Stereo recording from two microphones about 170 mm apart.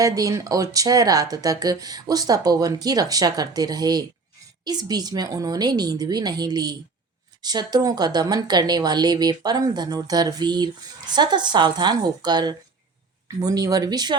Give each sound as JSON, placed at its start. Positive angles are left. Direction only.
{"t": 0.0, "sound": "speech", "side_deg": -20}